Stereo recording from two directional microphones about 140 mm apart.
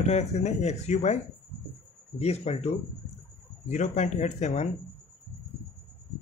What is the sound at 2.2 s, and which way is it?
Speech, 50° left (ahead or behind).